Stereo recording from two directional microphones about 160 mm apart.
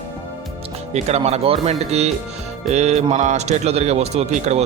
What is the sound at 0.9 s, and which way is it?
A man's voice, 45° right (ahead or behind).